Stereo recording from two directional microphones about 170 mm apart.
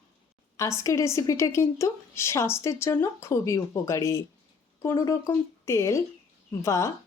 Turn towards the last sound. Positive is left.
turn(degrees=15)  # may be behind; listen again after turning